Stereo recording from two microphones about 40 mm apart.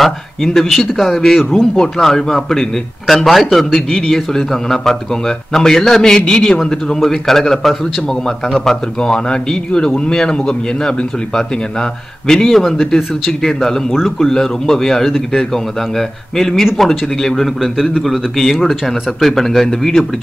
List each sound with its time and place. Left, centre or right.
0.0 s a man's voice: centre
7.0 s a man's voice: centre
17.6 s speech: centre